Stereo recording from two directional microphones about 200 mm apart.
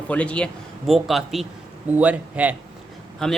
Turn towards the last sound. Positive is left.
turn(degrees=0)  # may be behind; listen again after turning